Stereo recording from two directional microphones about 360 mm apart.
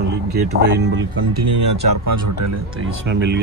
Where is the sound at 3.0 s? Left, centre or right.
Right.